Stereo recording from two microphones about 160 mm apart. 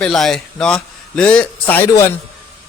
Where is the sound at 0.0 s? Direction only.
5° left (ahead or behind).